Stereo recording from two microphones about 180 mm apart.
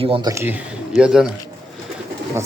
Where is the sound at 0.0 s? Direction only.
30° right (ahead or behind).